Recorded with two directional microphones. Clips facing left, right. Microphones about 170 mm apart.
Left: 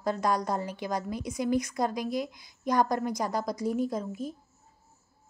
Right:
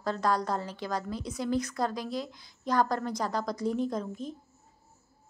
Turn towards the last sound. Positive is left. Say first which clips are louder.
# left 1 dB
turn(degrees=5)  # may be behind; listen again after turning